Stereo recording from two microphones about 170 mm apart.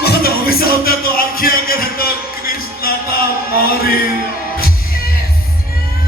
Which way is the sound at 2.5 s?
60° left (ahead or behind).